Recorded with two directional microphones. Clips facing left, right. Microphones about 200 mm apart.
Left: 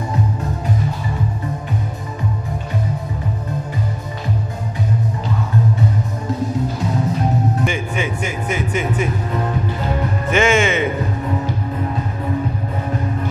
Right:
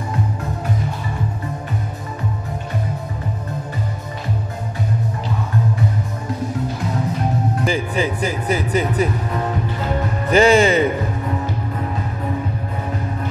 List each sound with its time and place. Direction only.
7.6 s speech: 35° right (ahead or behind)
10.3 s speech: 35° right (ahead or behind)